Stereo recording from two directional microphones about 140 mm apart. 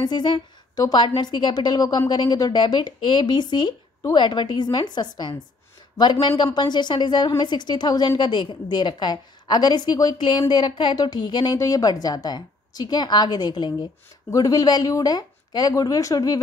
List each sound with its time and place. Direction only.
0.0 s a woman's voice: 35° left (ahead or behind)